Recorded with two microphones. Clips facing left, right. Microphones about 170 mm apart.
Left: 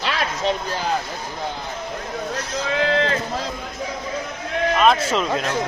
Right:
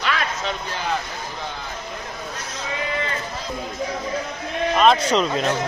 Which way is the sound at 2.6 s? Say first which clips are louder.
Left 7 dB; 80° left.